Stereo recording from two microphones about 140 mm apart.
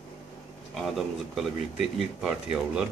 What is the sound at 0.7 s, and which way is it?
Speech, centre (ahead or behind).